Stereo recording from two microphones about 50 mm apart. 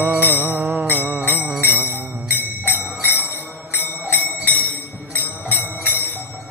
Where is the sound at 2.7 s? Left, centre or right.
Left.